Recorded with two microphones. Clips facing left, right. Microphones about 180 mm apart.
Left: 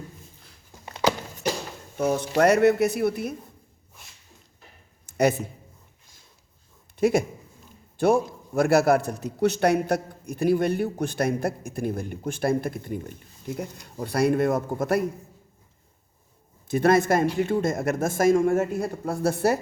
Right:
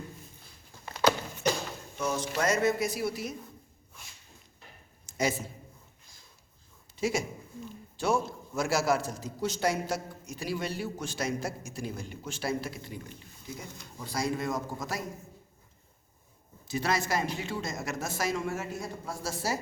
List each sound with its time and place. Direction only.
2.0 s a man's voice: 55° left (ahead or behind)
5.0 s a sound: 60° left (ahead or behind)
6.9 s a man's voice: 55° left (ahead or behind)
16.6 s speech: 55° left (ahead or behind)